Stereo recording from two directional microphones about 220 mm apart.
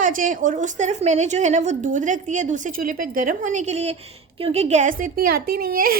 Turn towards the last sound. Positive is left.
turn(degrees=-40)  # may be behind; listen again after turning